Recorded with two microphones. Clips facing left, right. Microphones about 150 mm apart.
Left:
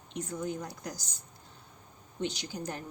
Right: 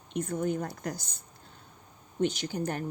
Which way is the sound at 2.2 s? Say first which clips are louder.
Right 6 dB; 50° right (ahead or behind).